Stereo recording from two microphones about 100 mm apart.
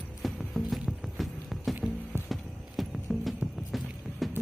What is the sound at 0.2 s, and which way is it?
Music, centre (ahead or behind).